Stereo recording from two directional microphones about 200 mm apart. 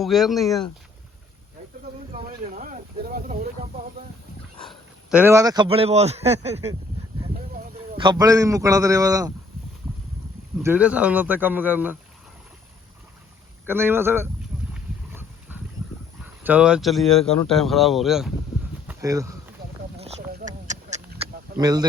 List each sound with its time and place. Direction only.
0.0 s speech: centre (ahead or behind)
2.6 s speech: 45° right (ahead or behind)
5.1 s a man's voice: 10° right (ahead or behind); by 6.7 s 30° right (ahead or behind)
7.9 s a man's voice: 20° right (ahead or behind)
10.6 s a man's voice: 10° right (ahead or behind)
13.7 s a man's voice: 10° right (ahead or behind)
14.7 s boat: 10° right (ahead or behind)
16.2 s speech: 10° right (ahead or behind)
18.9 s speech: 15° right (ahead or behind)
20.0 s a sound: 30° right (ahead or behind)
21.5 s speech: 20° right (ahead or behind)